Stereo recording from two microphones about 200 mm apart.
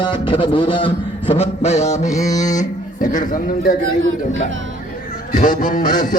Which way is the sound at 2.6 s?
40° left (ahead or behind).